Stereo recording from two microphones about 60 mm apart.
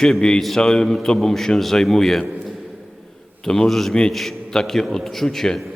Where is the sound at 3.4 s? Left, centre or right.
Centre.